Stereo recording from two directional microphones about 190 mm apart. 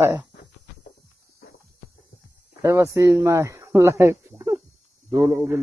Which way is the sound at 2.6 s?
15° right (ahead or behind).